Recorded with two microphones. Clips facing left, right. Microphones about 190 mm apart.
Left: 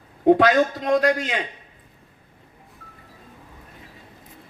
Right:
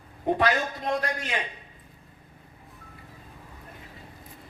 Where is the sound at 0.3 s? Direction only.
85° left.